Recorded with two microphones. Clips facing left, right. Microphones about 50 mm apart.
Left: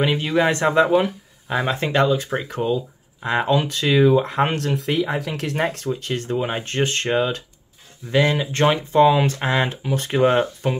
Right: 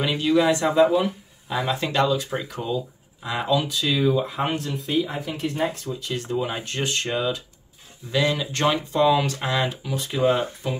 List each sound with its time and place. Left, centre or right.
0.0 s speech: left
0.5 s speech: left
1.5 s speech: left
6.3 s speech: left
8.1 s speech: left